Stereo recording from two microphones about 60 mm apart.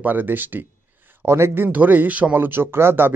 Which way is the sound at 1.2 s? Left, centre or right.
Right.